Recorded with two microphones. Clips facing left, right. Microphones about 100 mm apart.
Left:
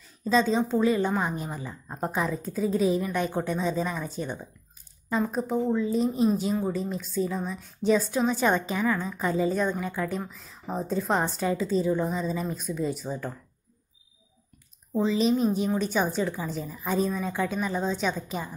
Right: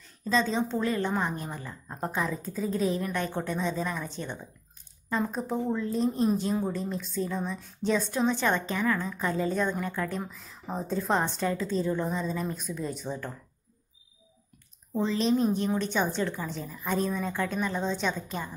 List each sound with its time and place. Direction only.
0.3 s a woman's voice: 15° left (ahead or behind)
15.0 s a woman's voice: 5° left (ahead or behind)